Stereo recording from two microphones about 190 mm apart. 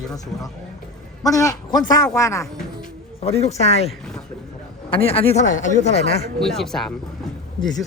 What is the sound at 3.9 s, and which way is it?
Speech, 5° left (ahead or behind).